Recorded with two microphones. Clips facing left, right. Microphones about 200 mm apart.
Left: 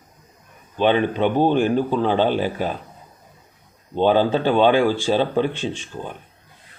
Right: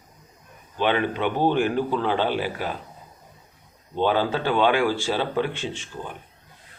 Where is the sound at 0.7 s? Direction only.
20° left (ahead or behind).